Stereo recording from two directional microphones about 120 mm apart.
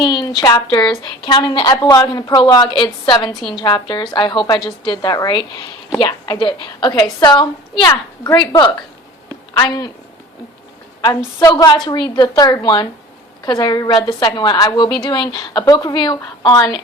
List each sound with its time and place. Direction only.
0.0 s a woman's voice: 40° left (ahead or behind)
11.3 s a woman's voice: 35° left (ahead or behind)